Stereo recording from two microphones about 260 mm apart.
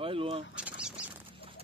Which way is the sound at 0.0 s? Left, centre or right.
Right.